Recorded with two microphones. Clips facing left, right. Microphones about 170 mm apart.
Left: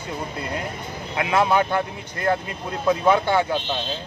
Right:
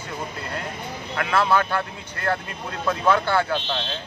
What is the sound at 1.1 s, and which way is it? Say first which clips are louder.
Speech: left 2 dB; 20° left (ahead or behind).